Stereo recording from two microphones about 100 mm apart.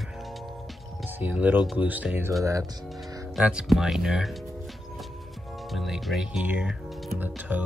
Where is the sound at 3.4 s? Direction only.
5° right (ahead or behind).